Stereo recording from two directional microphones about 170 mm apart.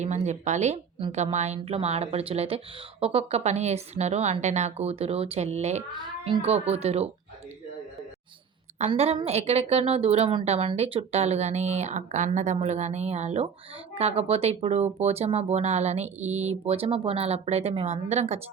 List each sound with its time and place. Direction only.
0.0 s speech: 45° right (ahead or behind)
8.9 s speech: 30° right (ahead or behind)